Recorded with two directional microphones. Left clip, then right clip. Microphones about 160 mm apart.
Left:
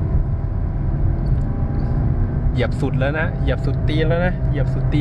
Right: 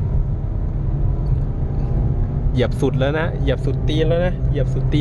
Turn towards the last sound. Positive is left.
turn(degrees=-10)  # may be behind; listen again after turning